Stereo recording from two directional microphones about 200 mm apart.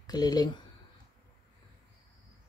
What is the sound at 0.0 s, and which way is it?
Speech, 20° left (ahead or behind).